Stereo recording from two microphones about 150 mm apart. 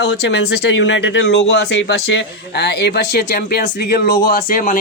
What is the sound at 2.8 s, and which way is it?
Speech, 90° left.